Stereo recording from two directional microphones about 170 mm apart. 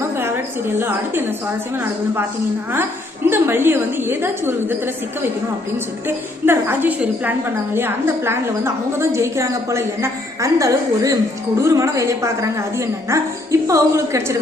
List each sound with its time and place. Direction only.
0.8 s a woman's voice: 15° right (ahead or behind)
3.2 s a woman's voice: 15° right (ahead or behind)
6.1 s a woman's voice: 15° right (ahead or behind)